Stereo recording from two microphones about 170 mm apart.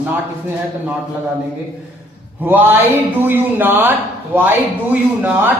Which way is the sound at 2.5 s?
10° right (ahead or behind).